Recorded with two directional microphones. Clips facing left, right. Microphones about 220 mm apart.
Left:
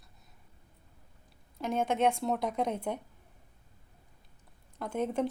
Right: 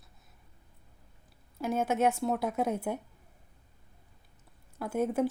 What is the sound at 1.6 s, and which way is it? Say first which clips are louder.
Speech: right 1 dB; 5° right (ahead or behind).